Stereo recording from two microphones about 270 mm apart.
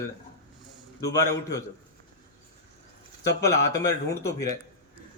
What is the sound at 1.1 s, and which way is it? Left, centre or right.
Speech, centre.